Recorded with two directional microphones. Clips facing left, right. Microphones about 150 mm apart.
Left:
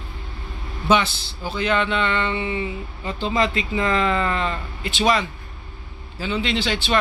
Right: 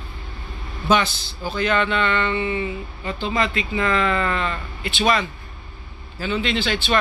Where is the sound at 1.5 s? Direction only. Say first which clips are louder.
Right 1 dB; 20° left (ahead or behind).